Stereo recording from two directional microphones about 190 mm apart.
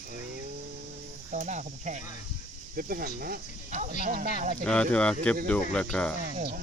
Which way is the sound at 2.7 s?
50° right (ahead or behind).